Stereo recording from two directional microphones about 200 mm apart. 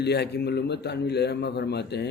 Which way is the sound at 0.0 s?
55° left (ahead or behind).